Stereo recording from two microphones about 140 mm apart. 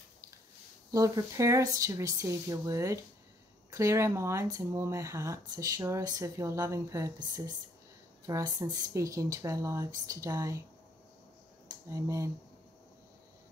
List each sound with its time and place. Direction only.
0.9 s speech: 25° right (ahead or behind)
11.9 s speech: 20° right (ahead or behind)